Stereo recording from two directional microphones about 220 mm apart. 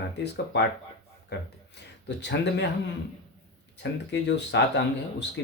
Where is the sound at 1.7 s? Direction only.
50° left (ahead or behind).